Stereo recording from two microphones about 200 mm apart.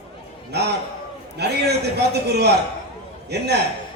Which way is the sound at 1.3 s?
55° right (ahead or behind).